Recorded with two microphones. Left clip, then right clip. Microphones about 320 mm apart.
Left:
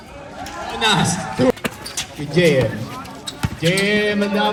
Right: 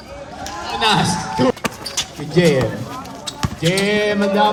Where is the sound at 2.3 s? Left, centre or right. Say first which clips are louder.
Even; right.